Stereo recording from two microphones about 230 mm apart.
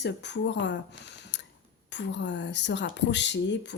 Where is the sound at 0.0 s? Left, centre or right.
Left.